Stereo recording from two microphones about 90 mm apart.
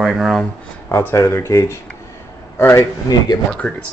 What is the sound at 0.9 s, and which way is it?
A man's voice, 30° left (ahead or behind).